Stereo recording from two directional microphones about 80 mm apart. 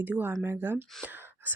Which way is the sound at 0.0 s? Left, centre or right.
Right.